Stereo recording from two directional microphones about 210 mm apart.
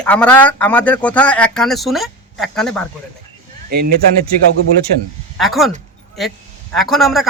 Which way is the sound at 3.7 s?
45° right (ahead or behind).